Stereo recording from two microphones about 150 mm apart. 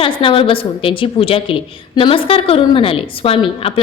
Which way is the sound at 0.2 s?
35° left (ahead or behind).